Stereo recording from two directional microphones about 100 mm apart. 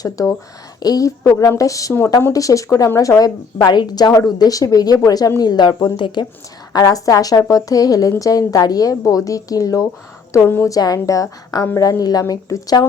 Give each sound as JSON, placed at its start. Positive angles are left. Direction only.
{"t": 0.8, "sound": "a woman's voice", "side_deg": 40}
{"t": 6.7, "sound": "a woman's voice", "side_deg": 35}
{"t": 10.8, "sound": "a woman's voice", "side_deg": 40}